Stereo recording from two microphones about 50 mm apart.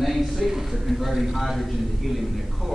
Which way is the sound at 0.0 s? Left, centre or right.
Centre.